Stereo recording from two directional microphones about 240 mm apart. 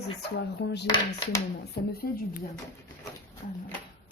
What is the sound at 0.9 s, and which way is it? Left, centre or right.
Speech, centre.